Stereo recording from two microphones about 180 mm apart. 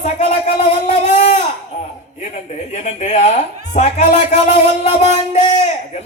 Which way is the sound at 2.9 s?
40° left (ahead or behind).